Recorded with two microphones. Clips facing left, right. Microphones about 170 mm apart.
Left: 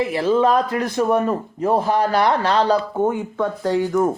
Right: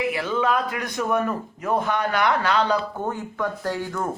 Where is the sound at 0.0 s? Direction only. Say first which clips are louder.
Left 6 dB; 35° left (ahead or behind).